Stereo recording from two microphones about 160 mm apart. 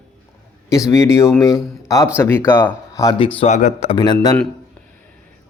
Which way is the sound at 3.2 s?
35° left (ahead or behind).